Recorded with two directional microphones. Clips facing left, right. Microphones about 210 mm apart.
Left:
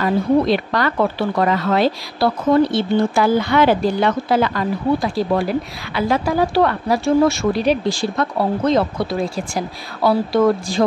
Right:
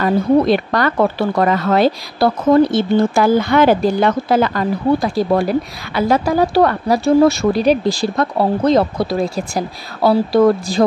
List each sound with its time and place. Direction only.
0.0 s speech: 50° right (ahead or behind)